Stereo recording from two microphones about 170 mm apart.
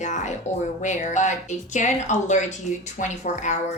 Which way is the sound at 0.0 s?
45° left (ahead or behind).